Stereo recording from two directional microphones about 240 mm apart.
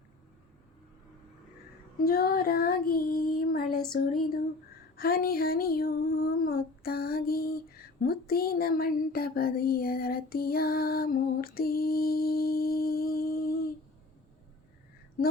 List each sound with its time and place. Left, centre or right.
2.0 s child singing: left
4.9 s female singing: left
8.0 s child singing: left
15.2 s speech: left